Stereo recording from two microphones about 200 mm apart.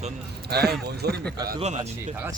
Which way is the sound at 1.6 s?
35° right (ahead or behind).